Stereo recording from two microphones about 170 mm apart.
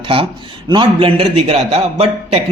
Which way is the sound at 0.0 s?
30° right (ahead or behind).